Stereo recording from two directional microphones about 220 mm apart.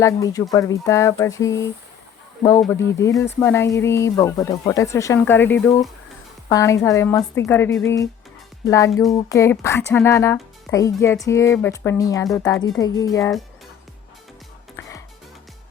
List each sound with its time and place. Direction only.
0.0 s speech: 15° left (ahead or behind)
2.7 s speech: 15° left (ahead or behind)